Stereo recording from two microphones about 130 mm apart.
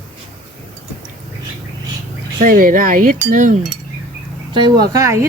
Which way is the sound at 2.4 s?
90° right.